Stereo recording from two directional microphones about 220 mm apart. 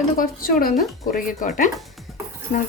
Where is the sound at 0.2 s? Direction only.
40° left (ahead or behind).